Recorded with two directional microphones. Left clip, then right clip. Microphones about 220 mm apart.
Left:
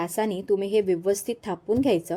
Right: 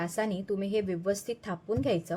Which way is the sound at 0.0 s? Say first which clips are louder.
Left 5 dB; 30° left (ahead or behind).